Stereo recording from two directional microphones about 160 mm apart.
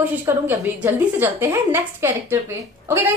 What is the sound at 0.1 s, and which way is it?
A woman's voice, 15° right (ahead or behind).